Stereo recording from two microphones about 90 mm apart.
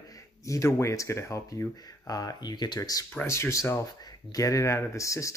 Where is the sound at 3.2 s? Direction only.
30° left (ahead or behind).